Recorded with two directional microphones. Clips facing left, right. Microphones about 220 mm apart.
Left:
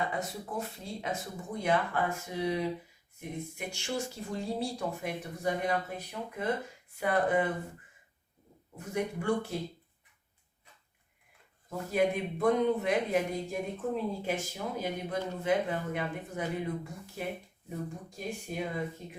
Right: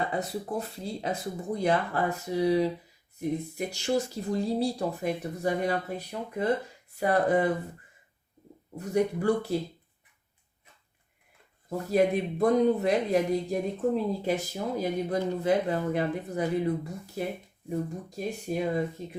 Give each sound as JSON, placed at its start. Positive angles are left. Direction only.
{"t": 0.1, "sound": "speech", "side_deg": -35}
{"t": 8.8, "sound": "speech", "side_deg": -35}
{"t": 11.9, "sound": "speech", "side_deg": -35}
{"t": 18.3, "sound": "speech", "side_deg": -40}